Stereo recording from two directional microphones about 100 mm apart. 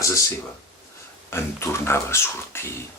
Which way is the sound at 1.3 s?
25° left (ahead or behind).